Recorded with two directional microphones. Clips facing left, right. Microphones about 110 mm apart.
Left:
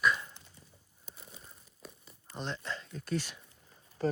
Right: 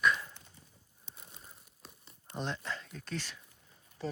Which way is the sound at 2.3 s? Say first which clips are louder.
Right 1 dB; 5° right (ahead or behind).